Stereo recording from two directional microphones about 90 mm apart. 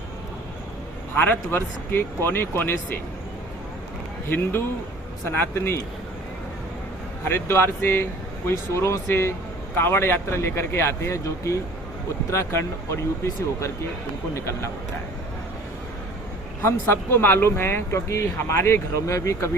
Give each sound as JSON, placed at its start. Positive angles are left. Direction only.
{"t": 1.1, "sound": "speech", "side_deg": 20}
{"t": 5.2, "sound": "speech", "side_deg": 30}
{"t": 7.3, "sound": "speech", "side_deg": 30}
{"t": 16.6, "sound": "speech", "side_deg": 25}